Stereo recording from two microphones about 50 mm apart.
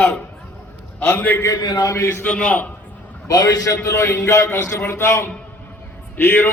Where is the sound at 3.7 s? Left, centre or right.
Left.